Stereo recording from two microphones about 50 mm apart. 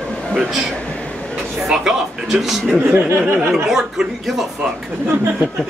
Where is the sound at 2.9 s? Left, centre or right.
Right.